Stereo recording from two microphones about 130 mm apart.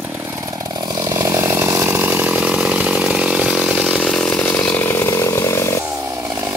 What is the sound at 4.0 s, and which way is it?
Chainsaw, 5° left (ahead or behind).